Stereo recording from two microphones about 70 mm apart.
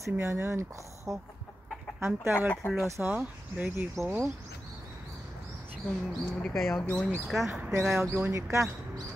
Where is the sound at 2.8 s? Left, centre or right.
Right.